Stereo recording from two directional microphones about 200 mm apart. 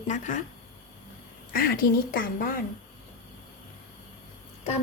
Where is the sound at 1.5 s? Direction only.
45° left (ahead or behind).